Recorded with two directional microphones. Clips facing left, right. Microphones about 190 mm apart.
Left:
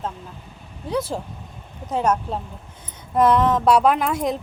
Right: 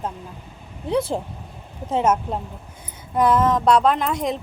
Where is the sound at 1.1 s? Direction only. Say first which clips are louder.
Right 2 dB; 20° right (ahead or behind).